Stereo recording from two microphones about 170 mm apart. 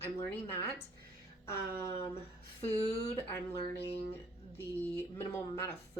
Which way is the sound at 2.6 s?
35° left (ahead or behind).